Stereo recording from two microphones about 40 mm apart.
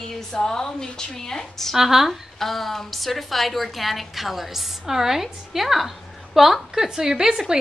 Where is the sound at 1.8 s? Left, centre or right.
Centre.